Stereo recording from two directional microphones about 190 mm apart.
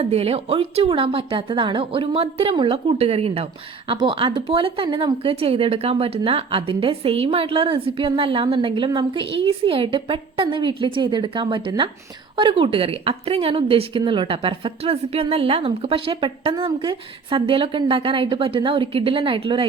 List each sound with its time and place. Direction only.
0.0 s speech: 30° right (ahead or behind)